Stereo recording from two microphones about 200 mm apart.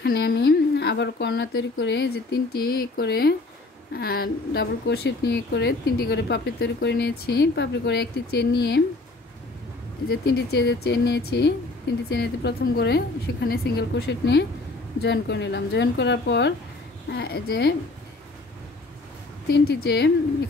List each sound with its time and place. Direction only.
0.0 s a woman's voice: 55° left (ahead or behind)
10.0 s speech: 50° left (ahead or behind)
19.4 s speech: 55° left (ahead or behind)